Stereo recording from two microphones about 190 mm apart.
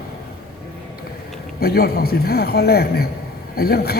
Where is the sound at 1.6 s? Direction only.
55° left (ahead or behind).